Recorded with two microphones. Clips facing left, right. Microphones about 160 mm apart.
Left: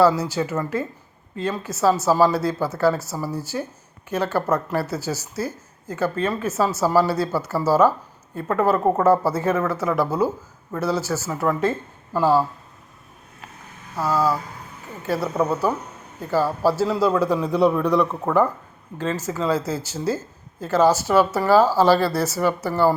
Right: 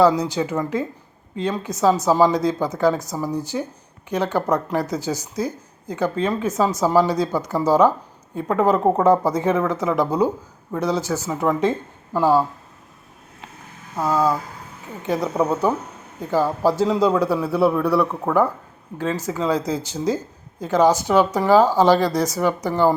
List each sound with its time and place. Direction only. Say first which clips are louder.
0.0 s speech: right 1 dB; 15° right (ahead or behind)
13.9 s a woman's voice: right 1 dB; 20° right (ahead or behind)